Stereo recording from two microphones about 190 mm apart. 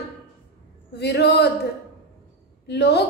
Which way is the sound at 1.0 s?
60° left (ahead or behind).